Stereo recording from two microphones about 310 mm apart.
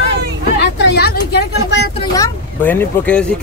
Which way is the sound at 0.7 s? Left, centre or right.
Left.